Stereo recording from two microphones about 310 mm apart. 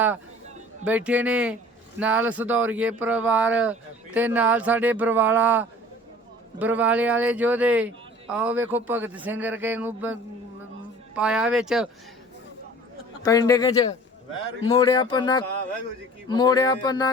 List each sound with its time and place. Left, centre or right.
0.9 s speech: centre
13.2 s speech: centre